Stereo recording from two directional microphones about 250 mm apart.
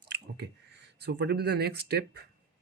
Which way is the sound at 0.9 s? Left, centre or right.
Right.